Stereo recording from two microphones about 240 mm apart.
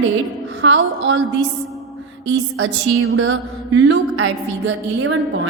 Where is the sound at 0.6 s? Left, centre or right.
Right.